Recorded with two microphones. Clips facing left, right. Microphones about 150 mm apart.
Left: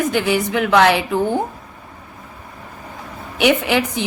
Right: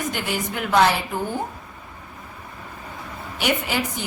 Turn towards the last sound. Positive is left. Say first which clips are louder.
# left 7 dB
turn(degrees=75)  # may be behind; listen again after turning